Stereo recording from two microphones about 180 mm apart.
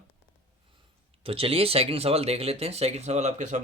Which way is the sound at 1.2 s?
30° right (ahead or behind).